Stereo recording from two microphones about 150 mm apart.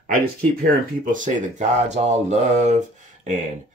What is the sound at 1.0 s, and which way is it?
Speech, 60° right (ahead or behind).